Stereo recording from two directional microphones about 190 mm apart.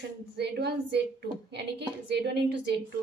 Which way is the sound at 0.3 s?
60° right (ahead or behind).